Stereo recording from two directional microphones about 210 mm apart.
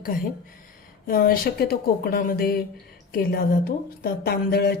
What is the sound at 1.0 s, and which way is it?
Speech, 45° left (ahead or behind).